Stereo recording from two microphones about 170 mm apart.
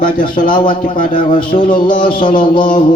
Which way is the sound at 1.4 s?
30° left (ahead or behind).